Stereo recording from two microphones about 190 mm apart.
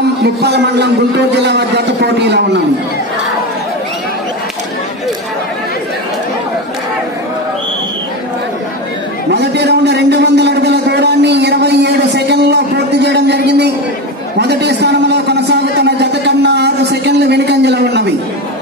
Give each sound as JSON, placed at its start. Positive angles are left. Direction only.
{"t": 0.2, "sound": "a man's voice", "side_deg": -60}
{"t": 9.3, "sound": "a sound", "side_deg": -65}
{"t": 14.4, "sound": "a man's voice", "side_deg": -60}